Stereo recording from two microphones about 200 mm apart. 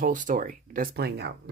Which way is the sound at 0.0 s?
40° right (ahead or behind).